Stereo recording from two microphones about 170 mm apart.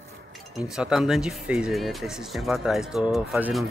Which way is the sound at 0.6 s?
5° right (ahead or behind).